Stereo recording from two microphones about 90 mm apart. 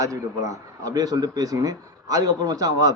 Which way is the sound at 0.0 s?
35° right (ahead or behind).